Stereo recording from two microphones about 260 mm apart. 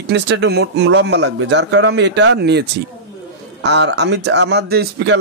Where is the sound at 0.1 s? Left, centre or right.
Right.